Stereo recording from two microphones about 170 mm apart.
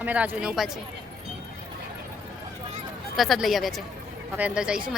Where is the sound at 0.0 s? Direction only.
10° right (ahead or behind).